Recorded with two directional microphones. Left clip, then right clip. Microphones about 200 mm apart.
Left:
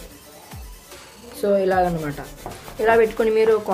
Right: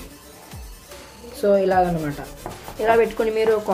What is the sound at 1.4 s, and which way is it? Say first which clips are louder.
Speech: right 1 dB; 10° left (ahead or behind).